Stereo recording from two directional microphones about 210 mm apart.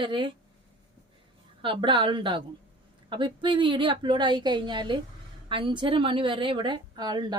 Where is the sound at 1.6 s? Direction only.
25° right (ahead or behind).